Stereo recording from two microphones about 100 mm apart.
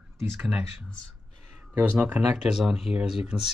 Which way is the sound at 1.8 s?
20° right (ahead or behind).